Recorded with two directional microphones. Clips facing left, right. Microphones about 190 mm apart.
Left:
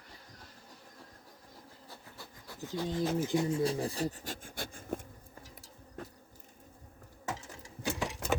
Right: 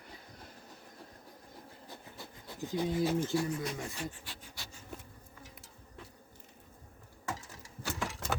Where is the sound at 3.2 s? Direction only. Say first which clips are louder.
Left 3 dB; 15° left (ahead or behind); by 5.1 s 50° left (ahead or behind).